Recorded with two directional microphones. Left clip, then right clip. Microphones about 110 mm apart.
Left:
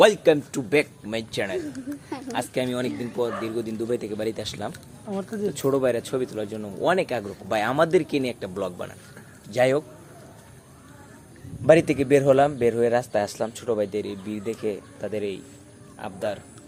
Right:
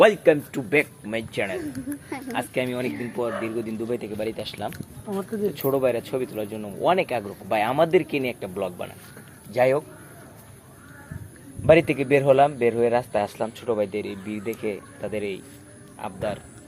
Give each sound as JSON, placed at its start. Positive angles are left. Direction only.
{"t": 0.0, "sound": "speech", "side_deg": 25}
{"t": 1.5, "sound": "speech", "side_deg": 0}
{"t": 2.3, "sound": "speech", "side_deg": 25}
{"t": 3.8, "sound": "a man's voice", "side_deg": 35}
{"t": 4.2, "sound": "speech", "side_deg": 50}
{"t": 4.7, "sound": "speech", "side_deg": 80}
{"t": 5.5, "sound": "a man's voice", "side_deg": 45}
{"t": 9.5, "sound": "speech", "side_deg": 45}
{"t": 11.6, "sound": "a man's voice", "side_deg": 35}